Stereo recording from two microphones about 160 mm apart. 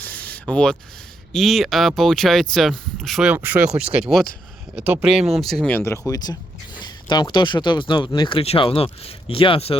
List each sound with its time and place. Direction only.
0.0 s a sound: 10° left (ahead or behind)
1.3 s speech: centre (ahead or behind)
6.1 s speech: 25° left (ahead or behind)